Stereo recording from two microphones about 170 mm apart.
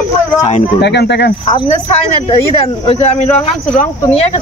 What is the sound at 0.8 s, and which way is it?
Speech, 80° left.